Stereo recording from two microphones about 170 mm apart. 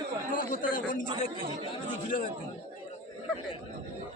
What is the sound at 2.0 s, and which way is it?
Speech, 50° left (ahead or behind).